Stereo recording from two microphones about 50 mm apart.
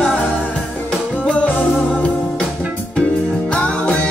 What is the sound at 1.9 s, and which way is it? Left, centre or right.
Music, left.